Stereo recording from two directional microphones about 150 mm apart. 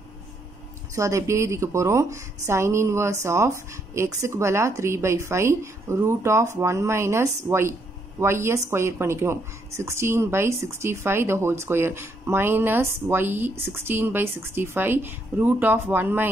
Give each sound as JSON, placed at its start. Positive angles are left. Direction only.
{"t": 0.9, "sound": "a woman's voice", "side_deg": -20}